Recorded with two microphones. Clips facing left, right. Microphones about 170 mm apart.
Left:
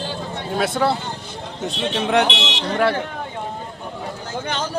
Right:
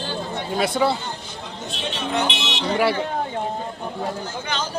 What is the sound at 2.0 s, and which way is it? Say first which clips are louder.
Speech: left 6 dB; 80° left.